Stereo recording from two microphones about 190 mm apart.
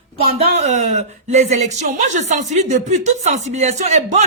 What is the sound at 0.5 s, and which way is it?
A woman's voice, 35° right (ahead or behind).